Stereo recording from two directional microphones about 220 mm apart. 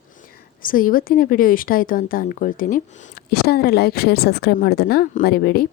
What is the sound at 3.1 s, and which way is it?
A woman's voice, 45° left (ahead or behind).